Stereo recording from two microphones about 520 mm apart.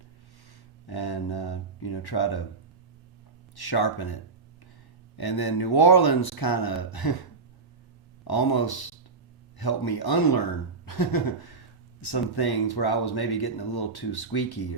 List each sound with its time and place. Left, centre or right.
0.9 s speech: left
3.5 s speech: left
8.3 s speech: left